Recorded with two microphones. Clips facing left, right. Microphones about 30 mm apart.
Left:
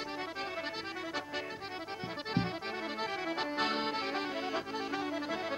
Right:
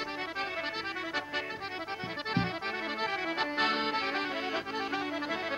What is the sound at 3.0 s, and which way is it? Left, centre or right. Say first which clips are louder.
Music: right 3 dB; right.